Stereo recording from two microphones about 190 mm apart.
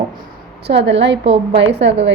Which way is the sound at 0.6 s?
65° right (ahead or behind).